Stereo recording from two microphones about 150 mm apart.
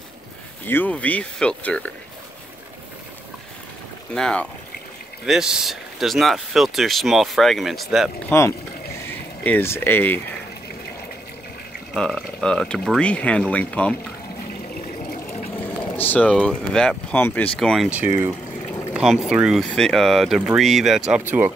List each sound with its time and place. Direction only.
0.7 s speech: 10° left (ahead or behind)
4.1 s speech: 5° left (ahead or behind)
8.3 s speech: 15° left (ahead or behind)
11.9 s speech: centre (ahead or behind)
16.0 s speech: 10° left (ahead or behind)
17.8 s speech: 10° right (ahead or behind)
18.9 s speech: centre (ahead or behind)